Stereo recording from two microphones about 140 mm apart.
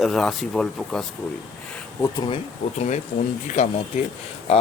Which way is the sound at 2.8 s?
55° left (ahead or behind).